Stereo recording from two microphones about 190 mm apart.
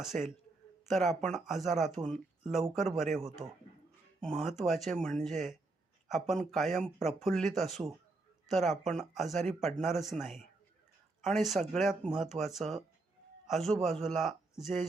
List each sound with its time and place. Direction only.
0.1 s speech: 5° left (ahead or behind)